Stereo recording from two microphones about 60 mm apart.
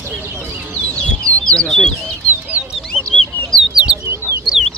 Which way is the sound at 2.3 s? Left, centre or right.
Right.